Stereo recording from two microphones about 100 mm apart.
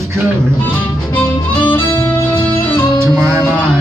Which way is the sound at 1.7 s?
25° left (ahead or behind).